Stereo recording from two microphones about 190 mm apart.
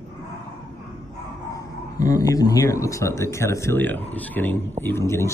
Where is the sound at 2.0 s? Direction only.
20° left (ahead or behind).